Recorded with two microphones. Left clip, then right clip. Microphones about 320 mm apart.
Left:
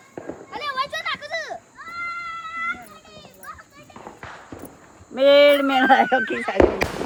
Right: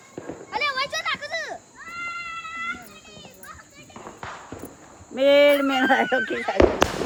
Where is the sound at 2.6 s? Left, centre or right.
Centre.